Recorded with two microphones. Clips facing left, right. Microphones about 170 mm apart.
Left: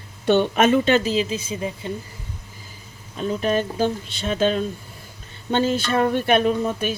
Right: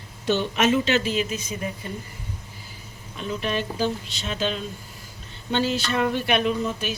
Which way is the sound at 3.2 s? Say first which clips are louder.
Left 5 dB; 40° left (ahead or behind).